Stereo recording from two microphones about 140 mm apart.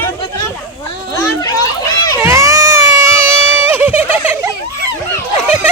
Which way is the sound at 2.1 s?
20° right (ahead or behind).